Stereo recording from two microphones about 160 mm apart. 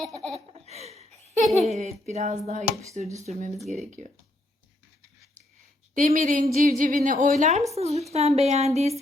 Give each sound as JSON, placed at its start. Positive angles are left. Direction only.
{"t": 0.5, "sound": "a sound", "side_deg": -40}
{"t": 1.5, "sound": "a woman's voice", "side_deg": -45}
{"t": 5.9, "sound": "a woman's voice", "side_deg": -55}